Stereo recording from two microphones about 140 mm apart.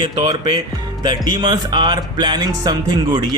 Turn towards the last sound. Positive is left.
turn(degrees=-30)  # may be behind; listen again after turning